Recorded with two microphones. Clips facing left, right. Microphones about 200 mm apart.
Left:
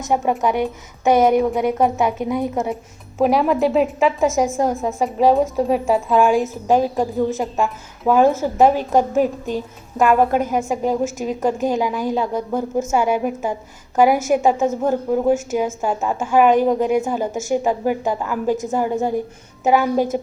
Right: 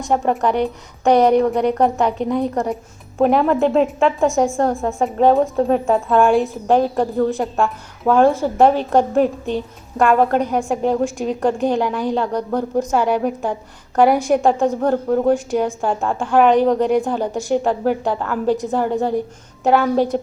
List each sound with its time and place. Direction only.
0.1 s a woman's voice: 5° left (ahead or behind)